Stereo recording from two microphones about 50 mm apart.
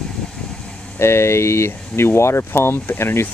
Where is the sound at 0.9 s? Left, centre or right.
Left.